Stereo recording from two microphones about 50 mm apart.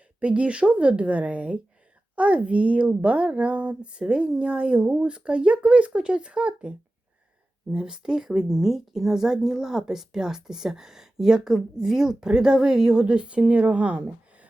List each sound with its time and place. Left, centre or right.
0.2 s speech: right